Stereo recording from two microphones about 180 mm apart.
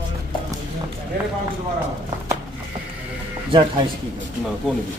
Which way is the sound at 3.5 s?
25° right (ahead or behind).